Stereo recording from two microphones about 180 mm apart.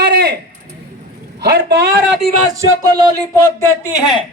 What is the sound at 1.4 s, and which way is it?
Speech, 65° right (ahead or behind).